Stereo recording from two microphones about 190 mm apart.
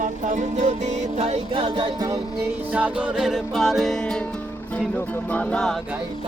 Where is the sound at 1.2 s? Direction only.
30° right (ahead or behind).